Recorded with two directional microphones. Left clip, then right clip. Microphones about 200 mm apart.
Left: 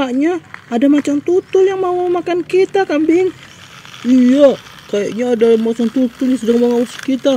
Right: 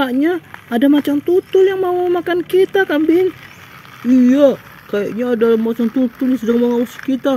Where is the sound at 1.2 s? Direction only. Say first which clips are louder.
Right 1 dB; 10° right (ahead or behind).